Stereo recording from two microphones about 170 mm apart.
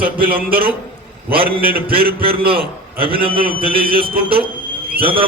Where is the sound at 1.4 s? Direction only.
60° right (ahead or behind).